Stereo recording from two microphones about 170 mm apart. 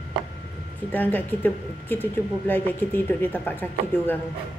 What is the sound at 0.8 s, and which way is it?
Speech, 10° left (ahead or behind).